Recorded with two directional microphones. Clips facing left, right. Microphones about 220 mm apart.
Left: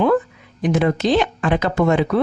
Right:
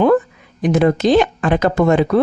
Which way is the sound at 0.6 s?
45° right (ahead or behind).